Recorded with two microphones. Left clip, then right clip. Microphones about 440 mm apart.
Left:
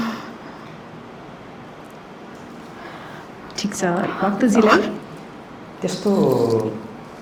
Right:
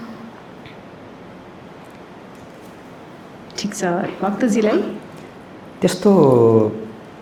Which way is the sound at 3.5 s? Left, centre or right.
Centre.